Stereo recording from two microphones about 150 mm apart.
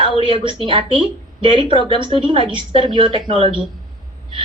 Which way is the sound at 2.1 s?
35° right (ahead or behind).